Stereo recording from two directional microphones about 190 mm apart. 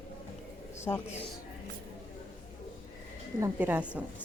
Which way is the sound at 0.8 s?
15° left (ahead or behind).